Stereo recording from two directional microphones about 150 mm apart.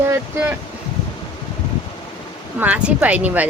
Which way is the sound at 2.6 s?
10° right (ahead or behind).